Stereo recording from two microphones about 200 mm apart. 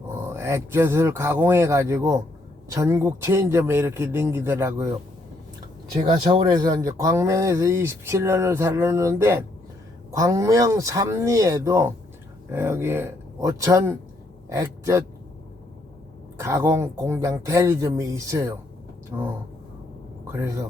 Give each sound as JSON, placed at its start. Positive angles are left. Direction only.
{"t": 0.1, "sound": "speech", "side_deg": -15}
{"t": 6.1, "sound": "speech", "side_deg": -20}
{"t": 16.4, "sound": "speech", "side_deg": -15}